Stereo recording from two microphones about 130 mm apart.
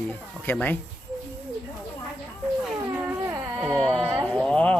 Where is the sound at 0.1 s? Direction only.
15° left (ahead or behind).